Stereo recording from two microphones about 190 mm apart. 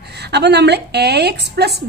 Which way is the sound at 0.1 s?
60° right (ahead or behind).